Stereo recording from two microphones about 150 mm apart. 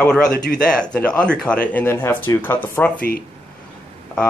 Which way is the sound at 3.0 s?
75° left (ahead or behind).